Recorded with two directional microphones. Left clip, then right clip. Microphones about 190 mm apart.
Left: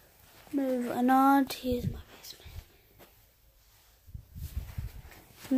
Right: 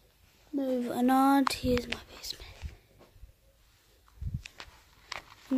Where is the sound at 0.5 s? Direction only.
Centre (ahead or behind).